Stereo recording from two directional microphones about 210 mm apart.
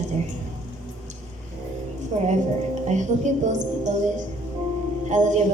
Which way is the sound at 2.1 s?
30° right (ahead or behind).